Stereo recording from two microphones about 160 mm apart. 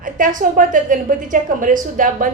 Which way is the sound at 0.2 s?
55° right (ahead or behind).